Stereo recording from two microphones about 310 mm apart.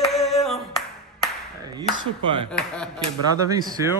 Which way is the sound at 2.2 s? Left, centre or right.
Centre.